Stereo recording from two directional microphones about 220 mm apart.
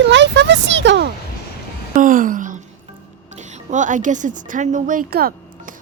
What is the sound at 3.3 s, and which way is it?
Speech, 35° right (ahead or behind).